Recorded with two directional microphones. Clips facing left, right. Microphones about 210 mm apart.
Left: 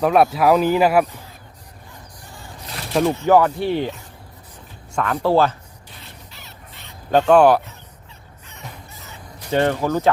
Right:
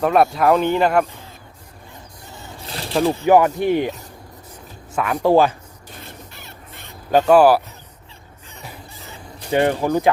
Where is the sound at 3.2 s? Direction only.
15° right (ahead or behind).